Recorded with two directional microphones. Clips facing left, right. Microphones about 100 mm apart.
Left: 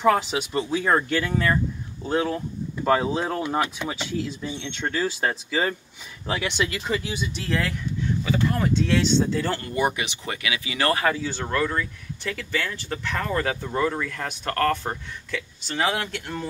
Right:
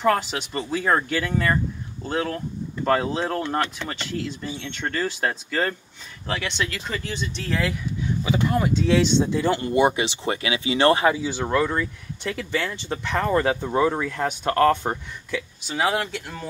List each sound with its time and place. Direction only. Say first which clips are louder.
0.0 s speech: left 1 dB; centre (ahead or behind)
8.2 s speech: right 2 dB; 15° right (ahead or behind)
15.3 s speech: right 1 dB; 5° right (ahead or behind)